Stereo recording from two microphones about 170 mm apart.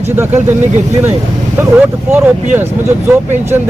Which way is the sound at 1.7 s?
10° right (ahead or behind).